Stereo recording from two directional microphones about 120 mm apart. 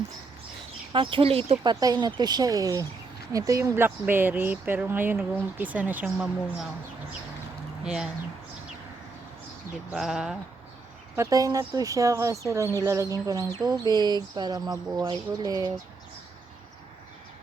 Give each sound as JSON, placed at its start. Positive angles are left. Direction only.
{"t": 0.9, "sound": "speech", "side_deg": -50}
{"t": 1.6, "sound": "speech", "side_deg": -35}
{"t": 7.9, "sound": "speech", "side_deg": -5}
{"t": 9.9, "sound": "speech", "side_deg": -5}
{"t": 11.2, "sound": "speech", "side_deg": -30}